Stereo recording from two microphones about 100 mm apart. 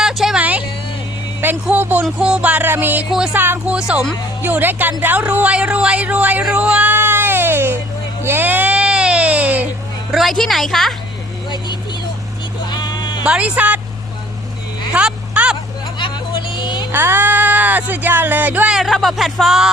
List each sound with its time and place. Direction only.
0.0 s a sound: 5° right (ahead or behind)
0.3 s vehicle: 15° right (ahead or behind)
1.6 s speech: 15° right (ahead or behind)
6.5 s music: 15° right (ahead or behind)
8.2 s baby cry: 20° right (ahead or behind)
10.1 s speech: centre (ahead or behind)
12.7 s sheep: 45° left (ahead or behind)
13.2 s speech: 10° right (ahead or behind)
14.9 s a sound: 10° right (ahead or behind)
16.0 s vehicle: 55° left (ahead or behind)
16.9 s speech: 20° right (ahead or behind)
18.7 s speech: centre (ahead or behind)